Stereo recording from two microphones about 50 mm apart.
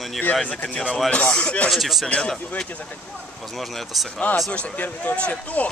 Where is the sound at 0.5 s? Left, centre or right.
Left.